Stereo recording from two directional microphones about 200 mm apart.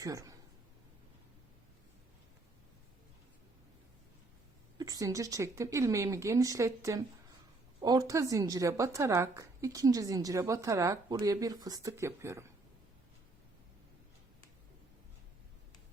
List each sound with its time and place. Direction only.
0.0 s speech: 15° right (ahead or behind)
4.8 s a woman's voice: 20° right (ahead or behind)